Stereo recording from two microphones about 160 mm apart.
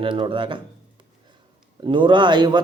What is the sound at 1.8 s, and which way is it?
Speech, 30° right (ahead or behind).